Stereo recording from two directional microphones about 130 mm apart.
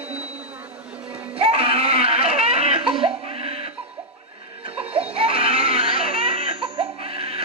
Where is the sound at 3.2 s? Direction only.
50° right (ahead or behind).